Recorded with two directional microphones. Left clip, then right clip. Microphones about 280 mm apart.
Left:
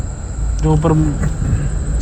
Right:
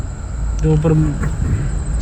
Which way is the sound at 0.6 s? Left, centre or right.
Left.